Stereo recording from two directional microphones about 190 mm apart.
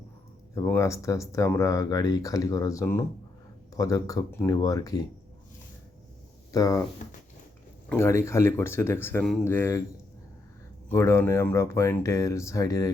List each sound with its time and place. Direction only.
0.5 s speech: 15° left (ahead or behind)
6.5 s speech: 20° left (ahead or behind)
7.9 s speech: 15° left (ahead or behind)
10.8 s speech: 15° left (ahead or behind)